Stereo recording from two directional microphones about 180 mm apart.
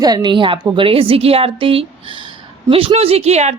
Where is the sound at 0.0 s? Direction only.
25° right (ahead or behind).